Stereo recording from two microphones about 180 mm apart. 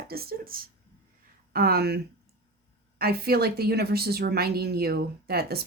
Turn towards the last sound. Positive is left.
turn(degrees=-60)  # may be behind; listen again after turning